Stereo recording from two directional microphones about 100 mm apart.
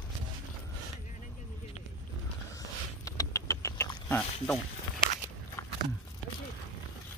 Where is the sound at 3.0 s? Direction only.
35° left (ahead or behind).